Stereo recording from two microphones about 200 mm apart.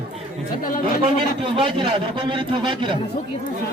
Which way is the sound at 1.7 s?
25° right (ahead or behind).